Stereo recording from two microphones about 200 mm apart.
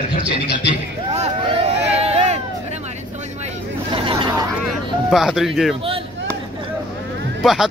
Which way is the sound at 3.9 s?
25° right (ahead or behind).